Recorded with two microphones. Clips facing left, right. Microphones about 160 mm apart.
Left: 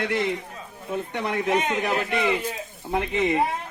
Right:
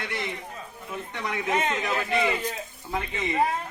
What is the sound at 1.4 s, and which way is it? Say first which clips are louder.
Speech: left 2 dB; 15° left (ahead or behind).